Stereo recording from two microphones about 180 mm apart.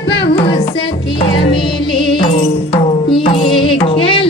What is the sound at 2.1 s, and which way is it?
Music, 30° left (ahead or behind).